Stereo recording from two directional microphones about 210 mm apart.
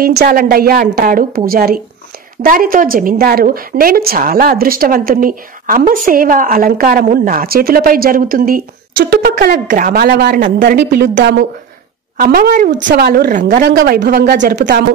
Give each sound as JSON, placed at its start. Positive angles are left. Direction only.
{"t": 0.0, "sound": "a woman's voice", "side_deg": -45}